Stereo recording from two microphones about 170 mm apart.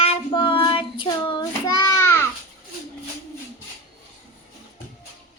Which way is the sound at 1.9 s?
15° left (ahead or behind).